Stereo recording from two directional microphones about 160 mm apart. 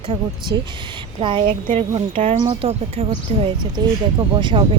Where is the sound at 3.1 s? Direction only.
30° right (ahead or behind).